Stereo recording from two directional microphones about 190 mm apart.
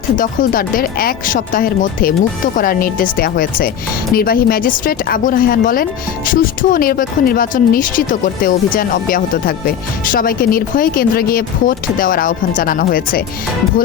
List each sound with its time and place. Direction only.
0.2 s speech: 50° left (ahead or behind)